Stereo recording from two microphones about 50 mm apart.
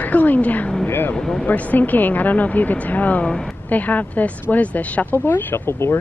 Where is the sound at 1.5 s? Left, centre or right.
Left.